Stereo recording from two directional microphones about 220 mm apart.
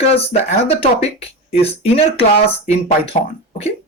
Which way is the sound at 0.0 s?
25° left (ahead or behind).